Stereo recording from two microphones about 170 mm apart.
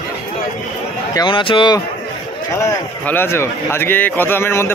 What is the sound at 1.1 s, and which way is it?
Speech, 30° left (ahead or behind).